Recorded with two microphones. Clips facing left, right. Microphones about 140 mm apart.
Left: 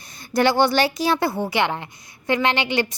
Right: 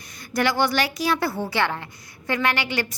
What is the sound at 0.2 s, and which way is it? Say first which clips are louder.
A woman's voice: left 4 dB; 30° left (ahead or behind).